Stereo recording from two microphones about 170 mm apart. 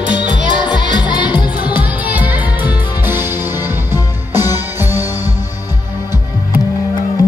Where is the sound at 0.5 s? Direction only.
25° left (ahead or behind).